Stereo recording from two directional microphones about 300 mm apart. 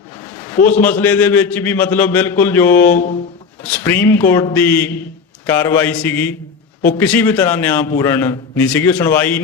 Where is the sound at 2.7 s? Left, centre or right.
Left.